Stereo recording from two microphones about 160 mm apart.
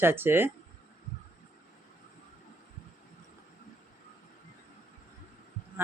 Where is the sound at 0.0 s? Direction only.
15° right (ahead or behind).